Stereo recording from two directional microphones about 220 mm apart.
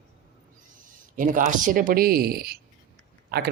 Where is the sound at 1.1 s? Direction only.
35° right (ahead or behind).